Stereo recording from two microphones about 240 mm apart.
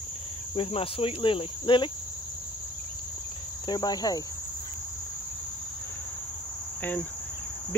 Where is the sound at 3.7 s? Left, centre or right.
Centre.